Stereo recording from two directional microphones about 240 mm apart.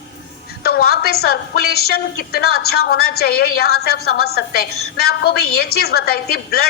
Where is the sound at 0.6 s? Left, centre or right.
Left.